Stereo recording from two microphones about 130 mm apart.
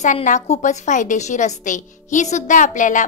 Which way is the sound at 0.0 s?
70° left (ahead or behind).